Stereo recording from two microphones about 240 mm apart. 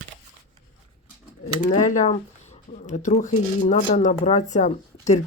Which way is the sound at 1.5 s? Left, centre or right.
Left.